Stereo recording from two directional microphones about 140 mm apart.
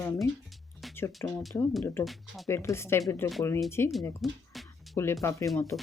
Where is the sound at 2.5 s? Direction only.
20° left (ahead or behind).